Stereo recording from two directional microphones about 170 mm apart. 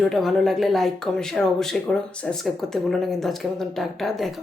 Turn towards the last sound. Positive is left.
turn(degrees=0)  # may be behind; listen again after turning